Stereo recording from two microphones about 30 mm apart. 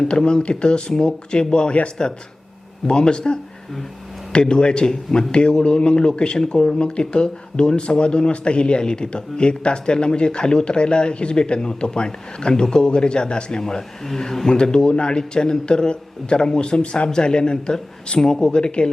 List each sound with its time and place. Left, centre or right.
0.0 s a man's voice: left